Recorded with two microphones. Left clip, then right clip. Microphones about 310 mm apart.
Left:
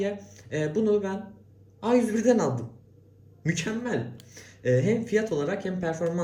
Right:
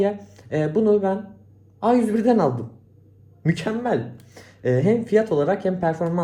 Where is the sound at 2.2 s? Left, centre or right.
Right.